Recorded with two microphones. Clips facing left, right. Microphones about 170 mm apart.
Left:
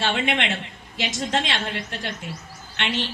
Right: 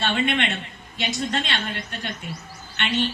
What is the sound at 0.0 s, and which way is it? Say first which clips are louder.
A woman's voice: right 1 dB; 90° left.